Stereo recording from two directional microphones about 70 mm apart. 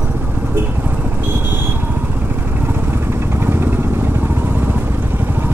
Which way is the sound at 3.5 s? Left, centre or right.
Right.